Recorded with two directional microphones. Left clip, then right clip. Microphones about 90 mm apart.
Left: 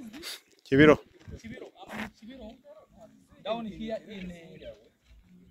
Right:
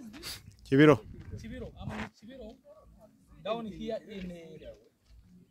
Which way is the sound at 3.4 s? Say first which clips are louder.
Left 2 dB; 55° right (ahead or behind).